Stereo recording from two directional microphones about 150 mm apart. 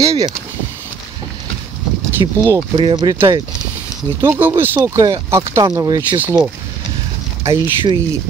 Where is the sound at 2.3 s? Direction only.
20° right (ahead or behind).